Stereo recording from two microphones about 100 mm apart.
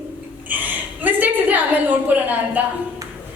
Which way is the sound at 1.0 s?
15° right (ahead or behind).